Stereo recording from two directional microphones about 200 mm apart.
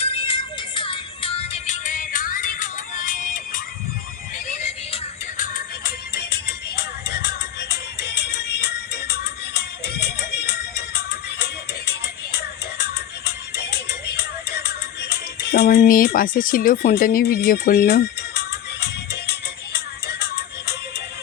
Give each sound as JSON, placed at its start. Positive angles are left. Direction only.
{"t": 0.0, "sound": "music", "side_deg": 30}
{"t": 5.4, "sound": "music", "side_deg": 45}